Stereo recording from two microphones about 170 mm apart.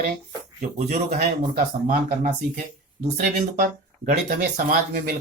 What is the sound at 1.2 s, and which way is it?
Speech, 55° right (ahead or behind).